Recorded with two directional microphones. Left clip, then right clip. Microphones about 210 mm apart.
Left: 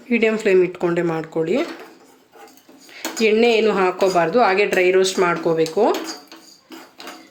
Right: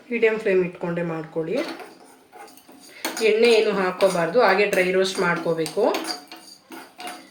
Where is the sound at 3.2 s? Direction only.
50° left (ahead or behind).